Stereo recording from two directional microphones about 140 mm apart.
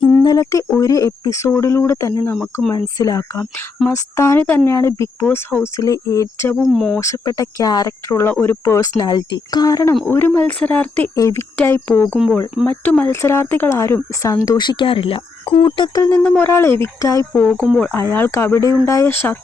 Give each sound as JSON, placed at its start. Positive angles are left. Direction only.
{"t": 0.1, "sound": "a sound", "side_deg": 25}
{"t": 0.8, "sound": "speech", "side_deg": 25}
{"t": 6.6, "sound": "speech", "side_deg": 0}
{"t": 7.0, "sound": "speech", "side_deg": 25}
{"t": 9.0, "sound": "speech", "side_deg": 30}
{"t": 10.1, "sound": "speech", "side_deg": 15}
{"t": 16.0, "sound": "speech", "side_deg": 20}
{"t": 17.3, "sound": "speech", "side_deg": 10}